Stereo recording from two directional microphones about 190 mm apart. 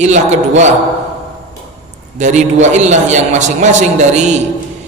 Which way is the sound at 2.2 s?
40° right (ahead or behind).